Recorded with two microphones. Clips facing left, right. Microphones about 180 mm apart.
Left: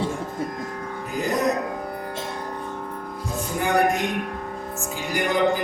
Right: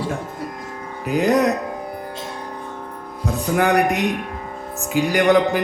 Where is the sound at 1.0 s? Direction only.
70° right (ahead or behind).